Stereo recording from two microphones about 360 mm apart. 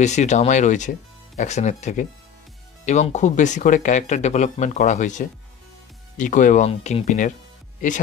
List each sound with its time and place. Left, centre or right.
0.0 s speech: centre